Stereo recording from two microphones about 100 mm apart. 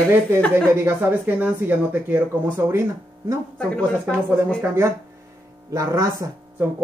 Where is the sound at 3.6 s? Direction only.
10° left (ahead or behind).